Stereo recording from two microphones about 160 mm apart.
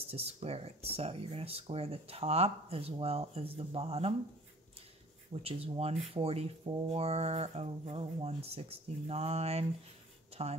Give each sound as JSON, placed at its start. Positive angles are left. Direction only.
{"t": 0.0, "sound": "speech", "side_deg": -40}
{"t": 5.3, "sound": "speech", "side_deg": -35}